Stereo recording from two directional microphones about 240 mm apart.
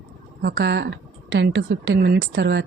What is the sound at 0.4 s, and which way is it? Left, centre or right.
Speech, right.